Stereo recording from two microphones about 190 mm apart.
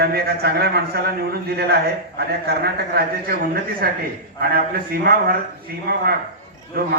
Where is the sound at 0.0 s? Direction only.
55° right (ahead or behind).